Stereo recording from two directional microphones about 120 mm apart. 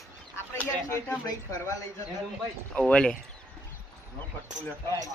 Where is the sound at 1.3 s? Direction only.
30° left (ahead or behind).